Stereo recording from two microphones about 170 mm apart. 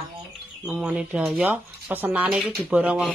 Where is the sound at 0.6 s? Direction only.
5° right (ahead or behind).